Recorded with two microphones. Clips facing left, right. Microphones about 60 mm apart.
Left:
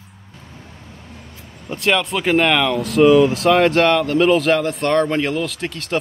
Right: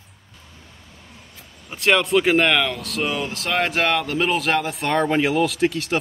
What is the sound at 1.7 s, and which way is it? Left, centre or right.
Speech, centre.